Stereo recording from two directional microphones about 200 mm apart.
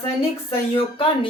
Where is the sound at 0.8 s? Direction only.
25° left (ahead or behind).